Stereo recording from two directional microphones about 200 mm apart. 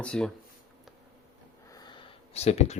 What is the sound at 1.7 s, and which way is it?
Sniff, 20° left (ahead or behind).